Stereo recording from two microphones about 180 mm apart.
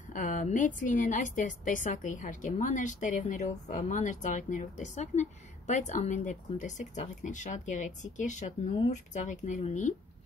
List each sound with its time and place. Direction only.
0.1 s a woman's voice: 45° left (ahead or behind)